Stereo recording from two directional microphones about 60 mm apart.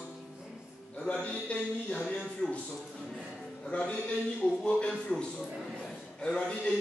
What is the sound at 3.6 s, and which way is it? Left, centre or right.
A man's voice, centre.